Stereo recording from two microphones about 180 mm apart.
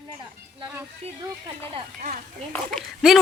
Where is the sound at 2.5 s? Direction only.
5° left (ahead or behind).